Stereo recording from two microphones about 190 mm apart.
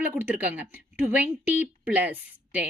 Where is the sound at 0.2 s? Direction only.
10° right (ahead or behind).